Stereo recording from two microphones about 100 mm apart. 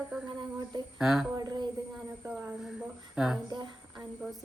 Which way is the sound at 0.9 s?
5° right (ahead or behind).